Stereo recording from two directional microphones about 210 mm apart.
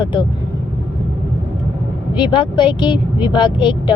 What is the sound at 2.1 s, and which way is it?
Speech, 20° left (ahead or behind).